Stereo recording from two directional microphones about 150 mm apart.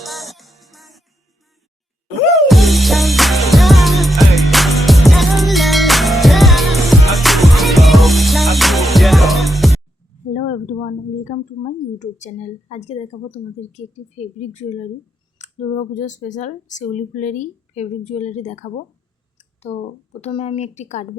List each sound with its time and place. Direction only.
0.0 s music: centre (ahead or behind)
2.5 s music: centre (ahead or behind)
10.3 s speech: 55° left (ahead or behind)
19.4 s a sound: 45° left (ahead or behind)
20.2 s speech: 45° left (ahead or behind)